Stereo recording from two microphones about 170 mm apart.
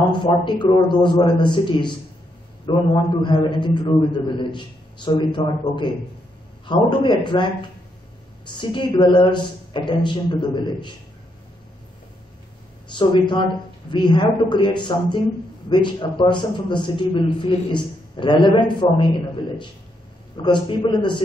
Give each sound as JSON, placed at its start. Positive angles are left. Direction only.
{"t": 0.1, "sound": "a man's voice", "side_deg": 25}
{"t": 8.5, "sound": "a man's voice", "side_deg": 25}
{"t": 12.8, "sound": "a man's voice", "side_deg": 25}
{"t": 20.4, "sound": "a man's voice", "side_deg": 30}